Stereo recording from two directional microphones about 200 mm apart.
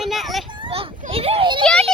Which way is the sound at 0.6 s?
30° right (ahead or behind).